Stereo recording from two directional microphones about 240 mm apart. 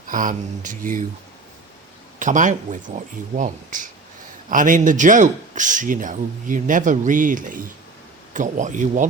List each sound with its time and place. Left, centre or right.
0.1 s a man's voice: right
2.1 s a man's voice: right